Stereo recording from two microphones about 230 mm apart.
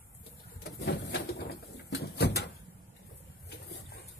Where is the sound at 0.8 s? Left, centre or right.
Left.